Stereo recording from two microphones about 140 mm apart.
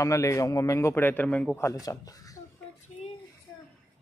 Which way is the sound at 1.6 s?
25° left (ahead or behind).